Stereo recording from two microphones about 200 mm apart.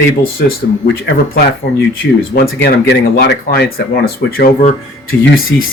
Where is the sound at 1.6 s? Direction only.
50° left (ahead or behind).